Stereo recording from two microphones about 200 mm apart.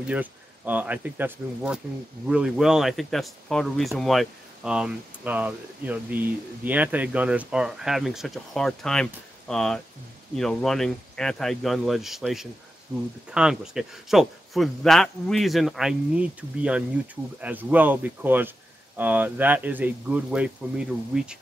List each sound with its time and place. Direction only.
0.0 s speech: 10° right (ahead or behind)